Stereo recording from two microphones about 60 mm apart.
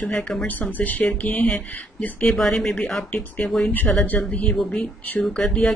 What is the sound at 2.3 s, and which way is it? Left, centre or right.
Speech, centre.